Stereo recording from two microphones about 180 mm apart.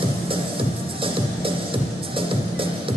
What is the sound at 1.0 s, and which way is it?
Music, 30° right (ahead or behind).